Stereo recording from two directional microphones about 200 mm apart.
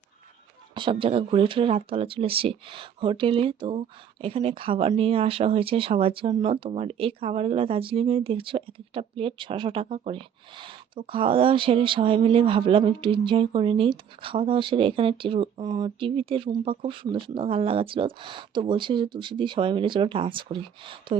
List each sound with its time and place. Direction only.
0.8 s speech: 25° right (ahead or behind)